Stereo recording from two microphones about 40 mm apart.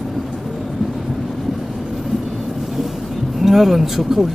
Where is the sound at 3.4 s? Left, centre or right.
Centre.